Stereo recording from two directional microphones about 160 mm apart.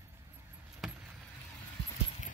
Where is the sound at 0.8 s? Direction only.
Centre (ahead or behind).